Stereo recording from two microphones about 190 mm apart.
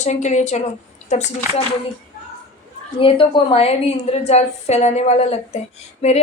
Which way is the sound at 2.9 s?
30° left (ahead or behind).